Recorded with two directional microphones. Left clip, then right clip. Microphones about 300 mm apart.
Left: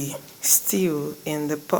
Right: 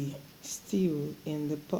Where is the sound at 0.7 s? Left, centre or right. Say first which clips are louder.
Left 8 dB; left.